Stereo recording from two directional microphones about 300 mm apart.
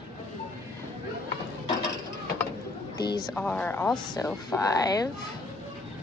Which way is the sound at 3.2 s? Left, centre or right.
Centre.